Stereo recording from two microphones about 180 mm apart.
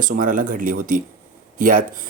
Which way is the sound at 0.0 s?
50° right (ahead or behind).